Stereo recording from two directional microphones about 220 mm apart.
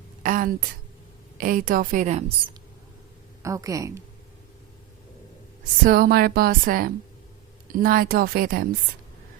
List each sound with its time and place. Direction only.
0.2 s a woman's voice: 40° right (ahead or behind)
3.4 s speech: 15° right (ahead or behind)
5.8 s a woman's voice: 40° right (ahead or behind)